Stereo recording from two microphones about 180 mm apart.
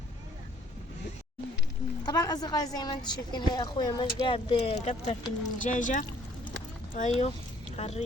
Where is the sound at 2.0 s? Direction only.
20° left (ahead or behind).